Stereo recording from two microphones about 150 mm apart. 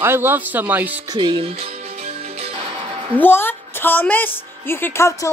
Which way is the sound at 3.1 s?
15° left (ahead or behind).